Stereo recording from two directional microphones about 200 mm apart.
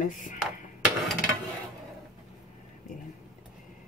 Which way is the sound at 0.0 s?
40° left (ahead or behind).